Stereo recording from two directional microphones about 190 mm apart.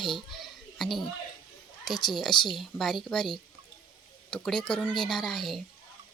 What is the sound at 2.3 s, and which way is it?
Speech, 25° left (ahead or behind).